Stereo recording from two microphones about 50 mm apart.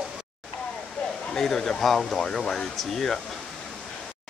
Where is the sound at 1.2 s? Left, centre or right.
Centre.